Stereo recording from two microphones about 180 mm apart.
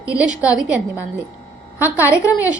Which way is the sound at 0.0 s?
5° right (ahead or behind).